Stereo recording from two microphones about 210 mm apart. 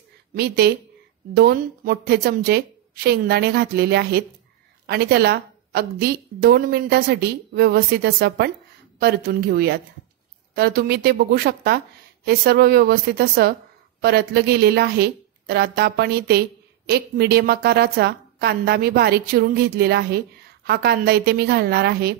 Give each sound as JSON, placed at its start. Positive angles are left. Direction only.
{"t": 0.3, "sound": "a woman's voice", "side_deg": -50}